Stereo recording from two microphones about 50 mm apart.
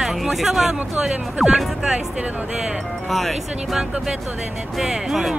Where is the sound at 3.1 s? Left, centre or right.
Centre.